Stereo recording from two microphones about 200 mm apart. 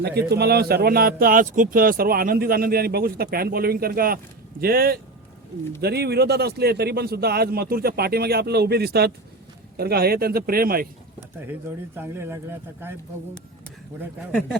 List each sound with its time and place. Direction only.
0.0 s speech: 55° right (ahead or behind)
11.2 s a sound: 10° right (ahead or behind)
11.9 s speech: 10° right (ahead or behind)